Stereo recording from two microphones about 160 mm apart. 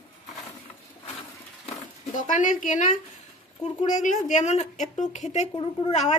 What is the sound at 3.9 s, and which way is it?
A woman's voice, 50° left (ahead or behind).